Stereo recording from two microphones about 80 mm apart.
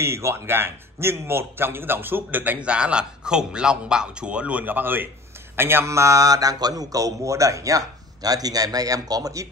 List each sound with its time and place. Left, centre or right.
0.0 s a man's voice: right